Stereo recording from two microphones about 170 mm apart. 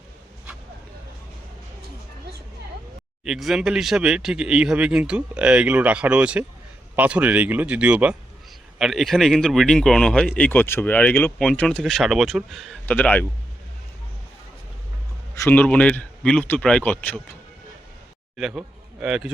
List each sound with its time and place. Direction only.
3.2 s speech: centre (ahead or behind)
15.4 s speech: 10° left (ahead or behind)
18.3 s speech: 5° right (ahead or behind)